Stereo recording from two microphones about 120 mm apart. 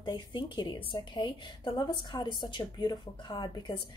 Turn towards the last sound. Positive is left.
turn(degrees=40)  # may be behind; listen again after turning